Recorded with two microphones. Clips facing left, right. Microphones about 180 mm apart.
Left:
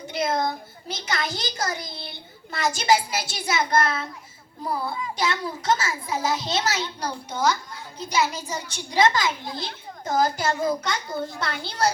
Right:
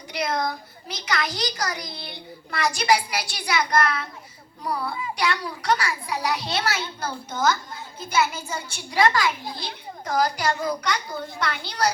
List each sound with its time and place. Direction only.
0.1 s a child's voice: 25° left (ahead or behind)